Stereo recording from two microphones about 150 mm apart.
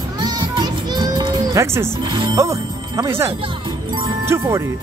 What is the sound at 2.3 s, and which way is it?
Music, 20° right (ahead or behind).